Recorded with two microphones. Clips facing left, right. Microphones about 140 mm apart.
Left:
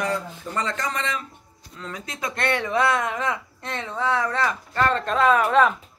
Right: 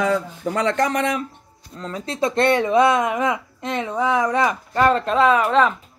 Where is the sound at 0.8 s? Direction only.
55° right (ahead or behind).